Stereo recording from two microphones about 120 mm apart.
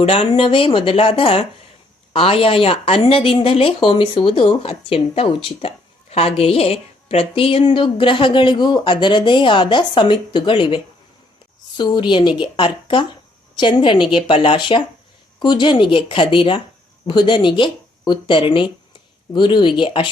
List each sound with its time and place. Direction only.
0.0 s speech: 50° left (ahead or behind)
11.8 s a woman's voice: 40° left (ahead or behind)